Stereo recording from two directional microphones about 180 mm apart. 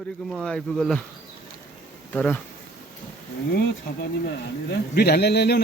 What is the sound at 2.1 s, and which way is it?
Speech, 5° left (ahead or behind).